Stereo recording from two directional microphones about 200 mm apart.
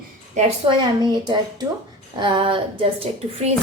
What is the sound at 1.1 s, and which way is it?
A woman's voice, 20° right (ahead or behind).